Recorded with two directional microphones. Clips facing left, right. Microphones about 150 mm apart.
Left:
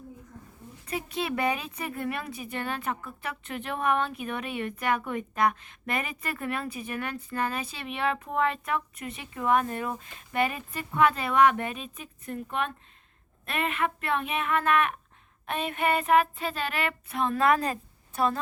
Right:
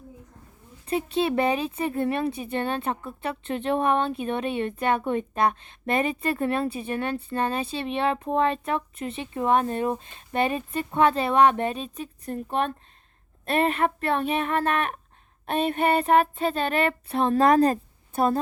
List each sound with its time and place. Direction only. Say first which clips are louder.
0.9 s speech: right 7 dB; 25° right (ahead or behind)
13.4 s child singing: right 6 dB; 35° right (ahead or behind)